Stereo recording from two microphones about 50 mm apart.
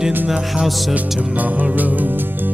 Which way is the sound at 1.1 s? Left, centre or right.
Right.